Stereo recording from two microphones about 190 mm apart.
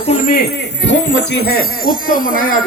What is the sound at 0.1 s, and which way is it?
Speech, 50° left (ahead or behind).